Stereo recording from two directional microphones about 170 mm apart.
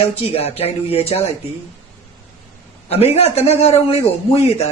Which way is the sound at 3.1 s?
40° left (ahead or behind).